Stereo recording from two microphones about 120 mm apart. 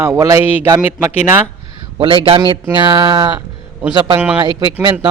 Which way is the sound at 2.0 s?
50° right (ahead or behind).